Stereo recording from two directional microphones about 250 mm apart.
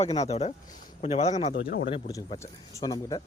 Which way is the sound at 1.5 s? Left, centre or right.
Left.